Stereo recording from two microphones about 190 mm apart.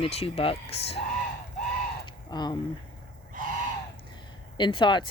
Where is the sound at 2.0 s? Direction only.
20° left (ahead or behind).